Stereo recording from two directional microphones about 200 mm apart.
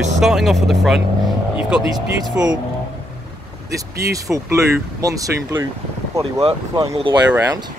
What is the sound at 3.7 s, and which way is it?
Speech, 15° right (ahead or behind).